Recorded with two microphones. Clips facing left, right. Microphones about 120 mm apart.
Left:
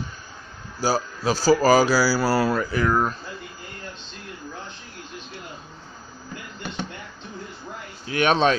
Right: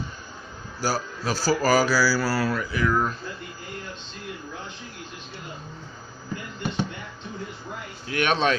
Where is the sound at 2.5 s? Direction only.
45° left (ahead or behind).